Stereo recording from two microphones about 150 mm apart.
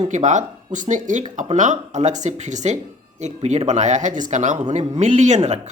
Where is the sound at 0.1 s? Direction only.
55° right (ahead or behind).